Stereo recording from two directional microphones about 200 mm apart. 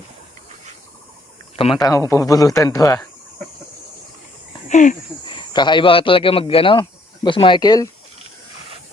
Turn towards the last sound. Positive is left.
turn(degrees=20)  # may be behind; listen again after turning